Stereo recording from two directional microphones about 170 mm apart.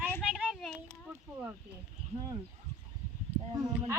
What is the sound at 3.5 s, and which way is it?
Speech, 20° right (ahead or behind).